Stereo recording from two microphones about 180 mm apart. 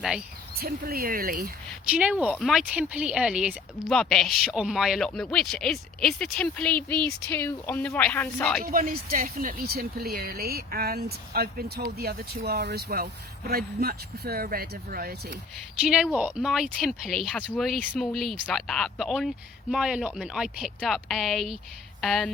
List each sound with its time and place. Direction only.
0.6 s speech: 55° right (ahead or behind)
1.9 s speech: 5° right (ahead or behind)
8.6 s speech: 50° right (ahead or behind)
15.8 s speech: 5° right (ahead or behind)